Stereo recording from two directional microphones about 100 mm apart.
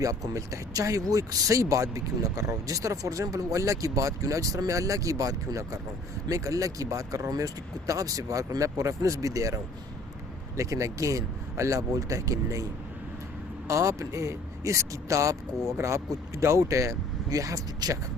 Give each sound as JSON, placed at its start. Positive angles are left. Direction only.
{"t": 0.0, "sound": "speech", "side_deg": -35}
{"t": 10.6, "sound": "speech", "side_deg": -30}
{"t": 13.7, "sound": "speech", "side_deg": -30}